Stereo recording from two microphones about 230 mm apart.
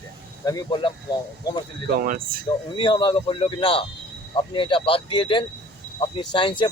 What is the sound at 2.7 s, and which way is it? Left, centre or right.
Speech, left.